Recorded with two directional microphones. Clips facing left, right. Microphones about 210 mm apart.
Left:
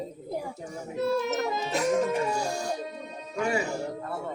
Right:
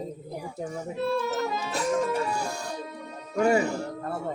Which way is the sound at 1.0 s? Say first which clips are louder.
Left 1 dB; 20° left (ahead or behind).